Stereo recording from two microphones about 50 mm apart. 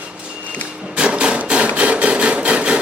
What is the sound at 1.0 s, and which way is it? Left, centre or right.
Hammer, right.